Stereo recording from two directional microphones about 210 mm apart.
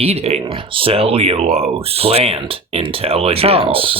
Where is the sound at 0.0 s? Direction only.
30° right (ahead or behind).